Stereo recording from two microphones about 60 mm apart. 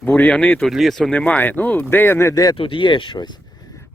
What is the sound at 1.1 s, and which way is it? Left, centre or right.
Speech, left.